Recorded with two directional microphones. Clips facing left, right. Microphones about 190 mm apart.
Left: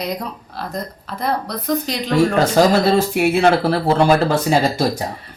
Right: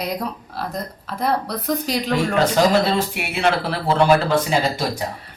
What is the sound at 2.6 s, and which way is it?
Speech, 40° left (ahead or behind).